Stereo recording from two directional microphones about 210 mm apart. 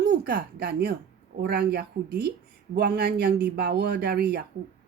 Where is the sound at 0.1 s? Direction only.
50° right (ahead or behind).